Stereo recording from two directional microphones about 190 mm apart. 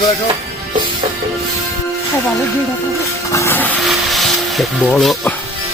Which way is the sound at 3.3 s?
15° left (ahead or behind).